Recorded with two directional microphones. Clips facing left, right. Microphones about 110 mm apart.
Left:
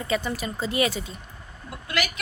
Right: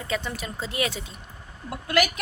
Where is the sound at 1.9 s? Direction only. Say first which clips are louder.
Right 6 dB; 45° right (ahead or behind).